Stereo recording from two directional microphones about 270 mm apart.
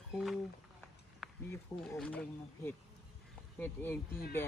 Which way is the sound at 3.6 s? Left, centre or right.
Centre.